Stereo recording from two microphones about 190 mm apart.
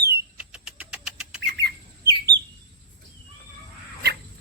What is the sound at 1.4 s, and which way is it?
Squawk, 60° right (ahead or behind).